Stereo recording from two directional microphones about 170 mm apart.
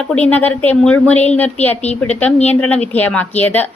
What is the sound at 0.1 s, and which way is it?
A woman's voice, 10° left (ahead or behind).